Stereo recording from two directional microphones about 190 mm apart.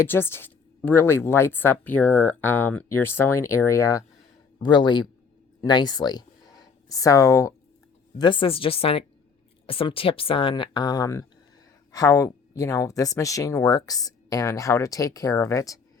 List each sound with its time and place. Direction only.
0.0 s speech: 10° left (ahead or behind)